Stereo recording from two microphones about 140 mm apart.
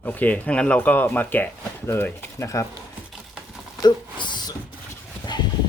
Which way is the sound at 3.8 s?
35° left (ahead or behind).